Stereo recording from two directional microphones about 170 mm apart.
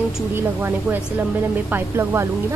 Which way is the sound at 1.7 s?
15° right (ahead or behind).